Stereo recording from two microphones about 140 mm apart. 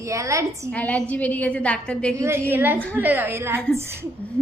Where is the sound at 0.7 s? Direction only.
10° left (ahead or behind).